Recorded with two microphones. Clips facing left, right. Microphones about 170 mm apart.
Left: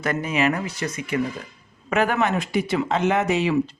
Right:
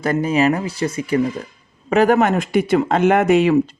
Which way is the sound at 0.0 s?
35° right (ahead or behind).